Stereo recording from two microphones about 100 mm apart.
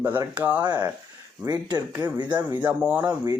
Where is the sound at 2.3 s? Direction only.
20° right (ahead or behind).